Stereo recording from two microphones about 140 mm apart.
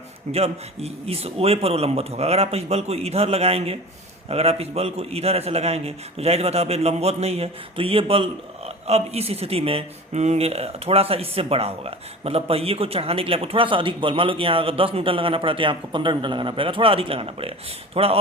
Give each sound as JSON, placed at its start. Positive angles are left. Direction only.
{"t": 0.3, "sound": "a man's voice", "side_deg": -50}